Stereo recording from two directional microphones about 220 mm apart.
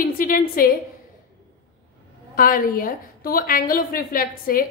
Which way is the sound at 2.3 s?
40° left (ahead or behind).